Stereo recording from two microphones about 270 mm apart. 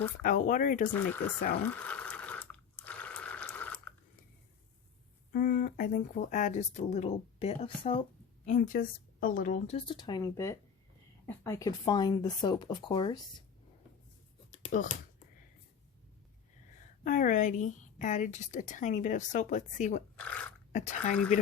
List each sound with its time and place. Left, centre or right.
0.2 s a woman's voice: left
1.6 s water: centre
5.3 s a woman's voice: left
14.5 s a sound: left
17.0 s a woman's voice: left
20.1 s speech: centre
20.7 s a woman's voice: left